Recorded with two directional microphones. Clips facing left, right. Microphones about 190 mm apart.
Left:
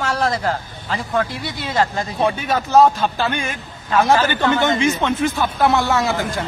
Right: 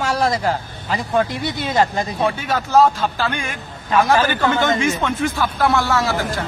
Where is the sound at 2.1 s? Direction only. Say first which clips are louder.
Left 3 dB; 15° left (ahead or behind).